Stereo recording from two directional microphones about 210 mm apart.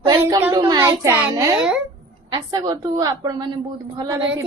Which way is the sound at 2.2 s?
20° right (ahead or behind).